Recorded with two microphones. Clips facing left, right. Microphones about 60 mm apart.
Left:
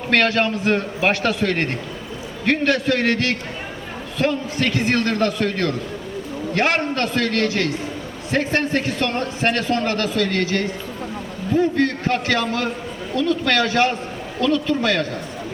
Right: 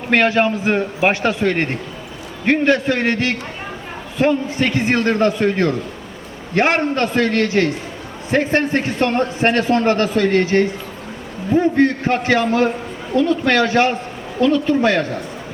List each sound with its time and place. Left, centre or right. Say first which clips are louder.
0.1 s a man's voice: right 3 dB; centre